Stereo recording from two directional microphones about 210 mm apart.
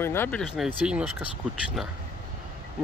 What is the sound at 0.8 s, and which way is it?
Speech, 5° right (ahead or behind).